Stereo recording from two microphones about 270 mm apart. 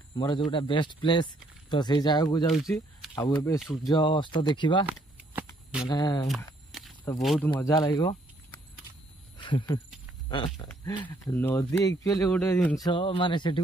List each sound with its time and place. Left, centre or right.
0.2 s speech: centre
2.7 s camera: centre
3.3 s speech: centre
3.5 s speech: centre
3.9 s speech: centre
4.8 s shuffling cards: centre
5.9 s speech: centre
6.2 s a sound: centre
7.2 s speech: centre
7.5 s speech: centre